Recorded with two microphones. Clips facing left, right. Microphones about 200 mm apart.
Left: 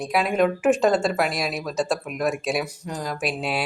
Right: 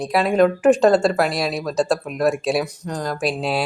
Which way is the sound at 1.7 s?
35° right (ahead or behind).